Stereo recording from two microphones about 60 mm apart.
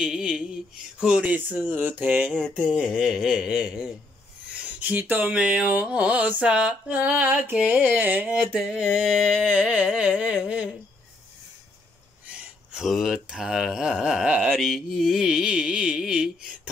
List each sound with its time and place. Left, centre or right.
0.0 s speech: centre
1.2 s mantra: right
2.7 s speech: centre
4.5 s a sound: right
4.8 s speech: right
5.4 s mantra: centre
8.5 s speech: centre
9.5 s mantra: right
12.3 s a sound: centre
12.8 s speech: centre; by 14.5 s right
14.5 s a sound: centre
14.9 s speech: centre